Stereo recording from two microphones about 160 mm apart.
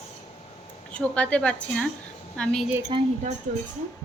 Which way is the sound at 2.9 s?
30° right (ahead or behind).